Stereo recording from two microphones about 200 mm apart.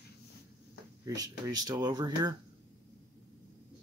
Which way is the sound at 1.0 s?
20° right (ahead or behind).